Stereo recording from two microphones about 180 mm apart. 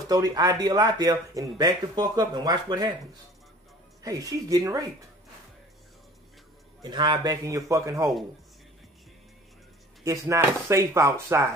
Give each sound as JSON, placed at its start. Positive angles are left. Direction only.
{"t": 0.1, "sound": "speech", "side_deg": -20}
{"t": 4.0, "sound": "speech", "side_deg": -20}
{"t": 6.8, "sound": "speech", "side_deg": -25}
{"t": 10.0, "sound": "speech", "side_deg": -15}